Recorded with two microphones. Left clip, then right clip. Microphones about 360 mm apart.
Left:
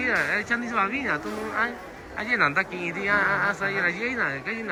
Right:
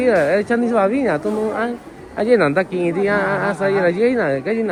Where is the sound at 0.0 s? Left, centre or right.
Centre.